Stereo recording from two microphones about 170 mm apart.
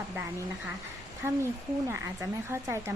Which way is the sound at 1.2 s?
15° right (ahead or behind).